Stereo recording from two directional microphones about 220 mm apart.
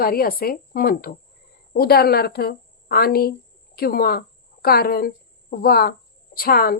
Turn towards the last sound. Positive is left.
turn(degrees=45)  # may be behind; listen again after turning